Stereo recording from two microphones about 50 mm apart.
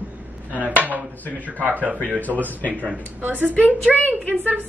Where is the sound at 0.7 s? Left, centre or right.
Right.